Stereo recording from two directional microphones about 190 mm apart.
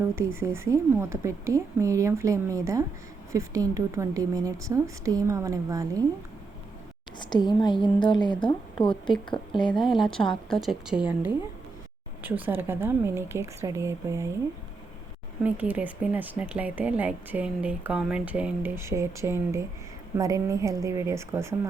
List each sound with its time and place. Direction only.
0.2 s speech: 15° right (ahead or behind)
7.2 s a woman's voice: 20° left (ahead or behind)
9.7 s a woman's voice: centre (ahead or behind)
15.4 s speech: 10° right (ahead or behind)